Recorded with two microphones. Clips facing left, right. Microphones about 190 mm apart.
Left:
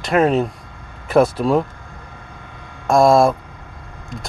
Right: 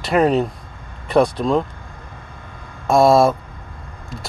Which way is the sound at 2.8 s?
Centre (ahead or behind).